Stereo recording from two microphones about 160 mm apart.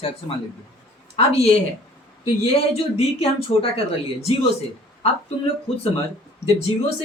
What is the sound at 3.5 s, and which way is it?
Speech, 40° left (ahead or behind).